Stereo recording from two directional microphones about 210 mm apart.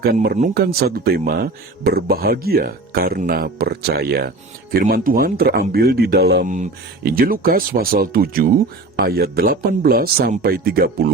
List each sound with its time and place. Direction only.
0.0 s speech: 45° right (ahead or behind)
6.5 s speech: 40° right (ahead or behind)